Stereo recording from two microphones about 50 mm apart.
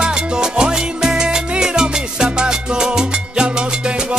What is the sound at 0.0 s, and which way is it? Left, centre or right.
Salsa music, centre.